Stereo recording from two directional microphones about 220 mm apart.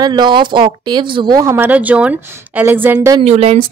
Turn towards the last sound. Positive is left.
turn(degrees=-25)  # may be behind; listen again after turning